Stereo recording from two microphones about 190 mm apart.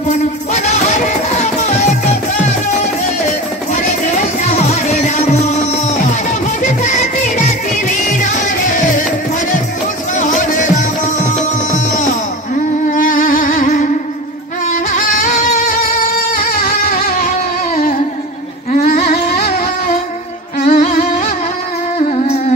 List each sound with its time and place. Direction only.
0.1 s music: 35° left (ahead or behind)
10.1 s music: 40° left (ahead or behind)
18.7 s a sound: 45° left (ahead or behind)
20.6 s music: 45° left (ahead or behind)